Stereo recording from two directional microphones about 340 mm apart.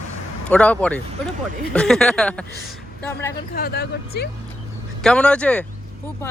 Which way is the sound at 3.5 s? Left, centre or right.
Left.